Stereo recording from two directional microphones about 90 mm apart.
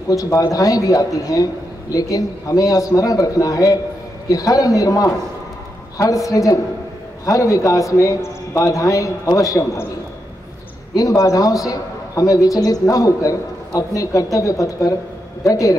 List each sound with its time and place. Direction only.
0.1 s a man's voice: 40° left (ahead or behind)
11.0 s a man's voice: 35° left (ahead or behind)